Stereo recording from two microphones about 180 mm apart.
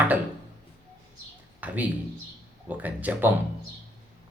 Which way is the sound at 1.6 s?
10° right (ahead or behind).